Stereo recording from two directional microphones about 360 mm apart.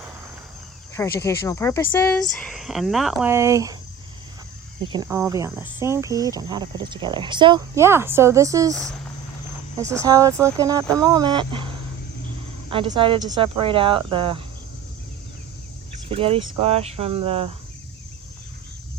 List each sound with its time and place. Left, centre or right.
0.9 s speech: centre
4.9 s speech: centre
9.9 s speech: centre
12.7 s speech: centre
16.0 s speech: centre